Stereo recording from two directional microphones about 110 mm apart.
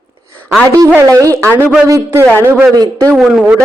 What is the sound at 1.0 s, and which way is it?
Speech, 30° right (ahead or behind).